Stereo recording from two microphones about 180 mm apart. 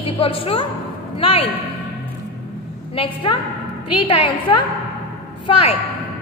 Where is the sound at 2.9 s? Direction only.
30° left (ahead or behind).